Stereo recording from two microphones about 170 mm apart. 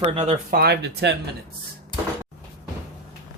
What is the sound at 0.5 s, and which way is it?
Speech, 70° right (ahead or behind).